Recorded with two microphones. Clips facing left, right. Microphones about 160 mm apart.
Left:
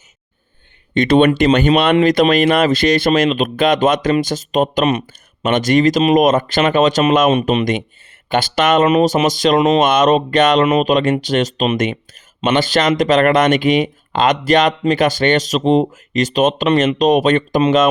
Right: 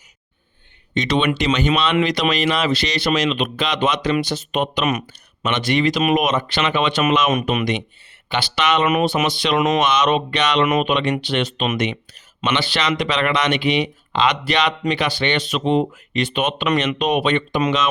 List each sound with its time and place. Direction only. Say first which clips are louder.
0.9 s speech: left 8 dB; 50° left (ahead or behind)
2.0 s speech: left 7 dB; 40° left (ahead or behind)
4.9 s speech: left 5 dB; 30° left (ahead or behind)
5.5 s speech: left 6 dB; 45° left (ahead or behind)
11.8 s speech: left 4 dB; 45° left (ahead or behind)